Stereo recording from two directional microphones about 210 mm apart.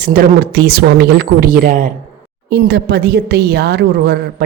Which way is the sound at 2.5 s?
55° right (ahead or behind).